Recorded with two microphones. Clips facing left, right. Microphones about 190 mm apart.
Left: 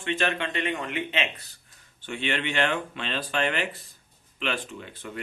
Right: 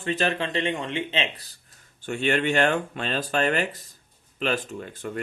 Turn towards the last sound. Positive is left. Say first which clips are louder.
# right 4 dB
turn(degrees=-45)  # may be behind; listen again after turning